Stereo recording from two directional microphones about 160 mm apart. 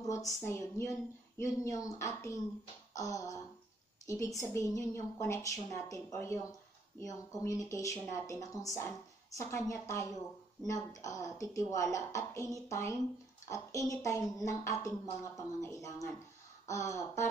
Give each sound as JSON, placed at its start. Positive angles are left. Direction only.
{"t": 0.0, "sound": "a woman's voice", "side_deg": 20}
{"t": 2.9, "sound": "music", "side_deg": 20}
{"t": 4.0, "sound": "a woman's voice", "side_deg": 20}